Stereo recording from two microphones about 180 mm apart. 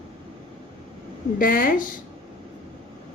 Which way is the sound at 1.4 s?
50° left (ahead or behind).